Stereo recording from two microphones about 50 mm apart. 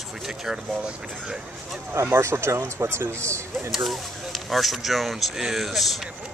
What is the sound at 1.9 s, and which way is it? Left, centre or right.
Speech, right.